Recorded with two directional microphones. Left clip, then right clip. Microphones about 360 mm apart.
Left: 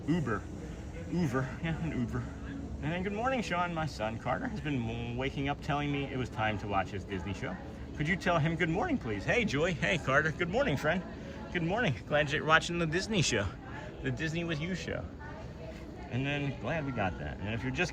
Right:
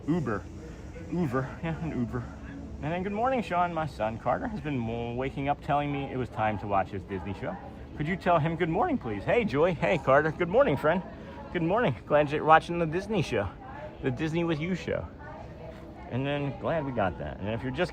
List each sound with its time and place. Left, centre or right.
0.1 s speech: centre
16.1 s speech: centre